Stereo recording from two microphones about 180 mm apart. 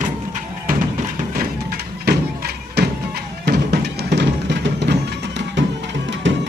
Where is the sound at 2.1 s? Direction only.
65° right (ahead or behind).